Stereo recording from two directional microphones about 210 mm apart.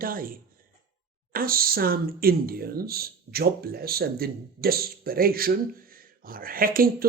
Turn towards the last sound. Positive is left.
turn(degrees=-45)  # may be behind; listen again after turning